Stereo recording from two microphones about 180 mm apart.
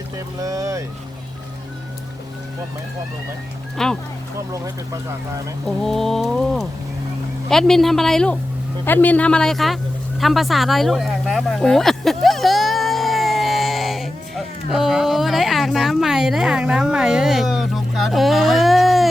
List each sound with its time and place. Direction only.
0.3 s speech: 20° right (ahead or behind)
3.8 s mantra: centre (ahead or behind)
5.6 s mantra: centre (ahead or behind)
8.8 s speech: 10° left (ahead or behind)
10.2 s a sound: centre (ahead or behind)